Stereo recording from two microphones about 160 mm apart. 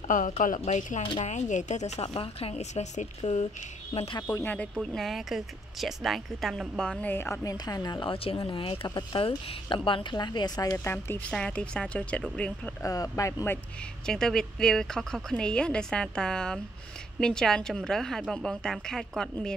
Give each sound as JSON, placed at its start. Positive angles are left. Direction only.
{"t": 0.4, "sound": "speech", "side_deg": 50}
{"t": 4.3, "sound": "a woman's voice", "side_deg": 15}
{"t": 4.7, "sound": "a woman's voice", "side_deg": 0}
{"t": 12.8, "sound": "speech", "side_deg": 20}
{"t": 14.0, "sound": "a woman's voice", "side_deg": 5}